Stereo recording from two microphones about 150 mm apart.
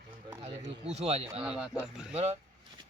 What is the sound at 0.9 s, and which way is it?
Speech, 45° right (ahead or behind).